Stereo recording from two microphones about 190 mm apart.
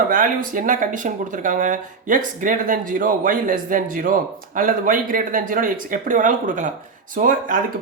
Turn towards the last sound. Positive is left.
turn(degrees=-45)  # may be behind; listen again after turning